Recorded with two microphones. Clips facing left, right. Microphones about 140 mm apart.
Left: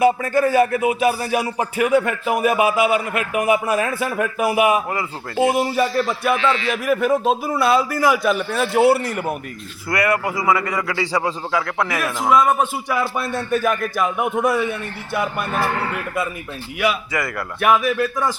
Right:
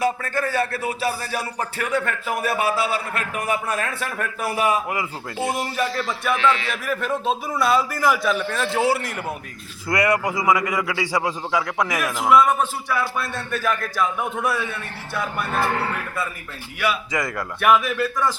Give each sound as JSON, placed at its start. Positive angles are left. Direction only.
{"t": 0.0, "sound": "speech", "side_deg": 15}
{"t": 9.9, "sound": "a man's voice", "side_deg": -20}
{"t": 12.5, "sound": "speech", "side_deg": 15}
{"t": 17.1, "sound": "a man's voice", "side_deg": -20}
{"t": 17.6, "sound": "speech", "side_deg": 10}